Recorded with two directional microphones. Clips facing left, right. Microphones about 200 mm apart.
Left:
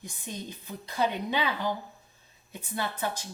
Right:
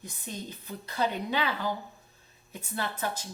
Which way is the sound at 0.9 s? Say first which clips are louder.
Left 1 dB; 15° left (ahead or behind).